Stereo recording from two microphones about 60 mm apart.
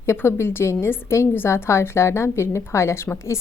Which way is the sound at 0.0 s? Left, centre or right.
Left.